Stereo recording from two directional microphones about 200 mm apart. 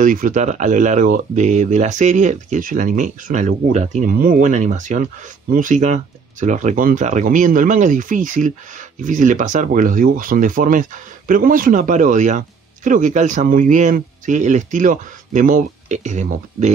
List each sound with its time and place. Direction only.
0.0 s speech: 40° right (ahead or behind)